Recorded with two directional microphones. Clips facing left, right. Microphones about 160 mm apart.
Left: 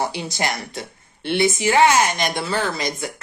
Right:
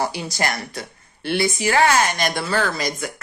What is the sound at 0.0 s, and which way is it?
A woman's voice, 20° left (ahead or behind).